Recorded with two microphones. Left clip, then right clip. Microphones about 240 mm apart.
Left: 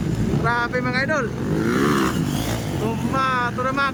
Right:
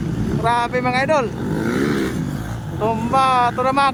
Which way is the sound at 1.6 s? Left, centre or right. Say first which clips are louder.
Left 1 dB; centre.